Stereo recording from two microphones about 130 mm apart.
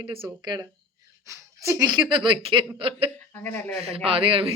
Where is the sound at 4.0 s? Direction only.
45° right (ahead or behind).